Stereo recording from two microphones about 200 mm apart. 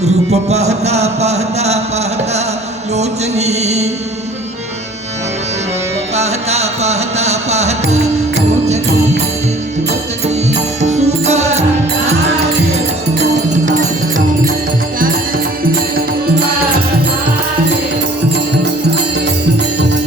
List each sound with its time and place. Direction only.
0.3 s music: 35° right (ahead or behind)
2.9 s music: 35° right (ahead or behind)
6.1 s music: 35° right (ahead or behind)
10.2 s music: 35° right (ahead or behind)